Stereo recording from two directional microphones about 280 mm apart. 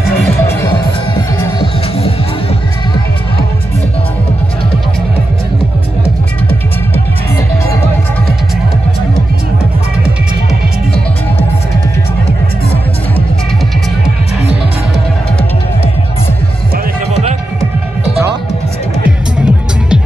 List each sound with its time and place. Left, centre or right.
1.6 s music: left
16.7 s music: right
19.0 s music: centre